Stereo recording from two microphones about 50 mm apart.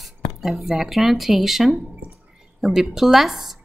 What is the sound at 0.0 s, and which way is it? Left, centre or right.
Speech, centre.